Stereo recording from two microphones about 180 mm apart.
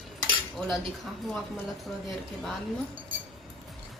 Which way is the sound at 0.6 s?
Centre (ahead or behind).